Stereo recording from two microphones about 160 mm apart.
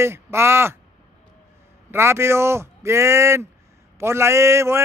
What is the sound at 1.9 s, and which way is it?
A man's voice, 15° right (ahead or behind).